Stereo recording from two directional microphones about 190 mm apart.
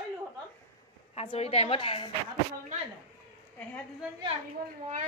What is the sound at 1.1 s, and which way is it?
A woman's voice, 30° left (ahead or behind).